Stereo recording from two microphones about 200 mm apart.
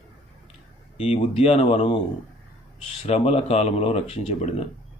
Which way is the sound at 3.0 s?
30° left (ahead or behind).